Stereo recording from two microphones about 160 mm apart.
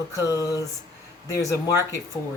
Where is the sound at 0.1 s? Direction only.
20° left (ahead or behind).